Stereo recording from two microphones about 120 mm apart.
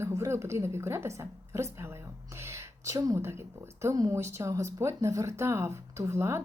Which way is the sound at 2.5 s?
25° right (ahead or behind).